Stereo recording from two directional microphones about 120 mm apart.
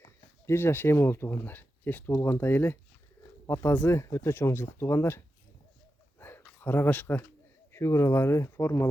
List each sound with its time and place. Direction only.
0.4 s speech: 20° left (ahead or behind)
6.1 s a sound: 20° left (ahead or behind)
6.6 s speech: 15° left (ahead or behind)